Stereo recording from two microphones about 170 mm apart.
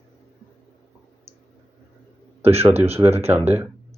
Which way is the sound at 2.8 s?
15° right (ahead or behind).